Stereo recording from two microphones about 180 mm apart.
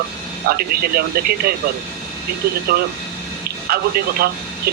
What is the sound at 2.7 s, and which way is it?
A man's voice, 55° right (ahead or behind).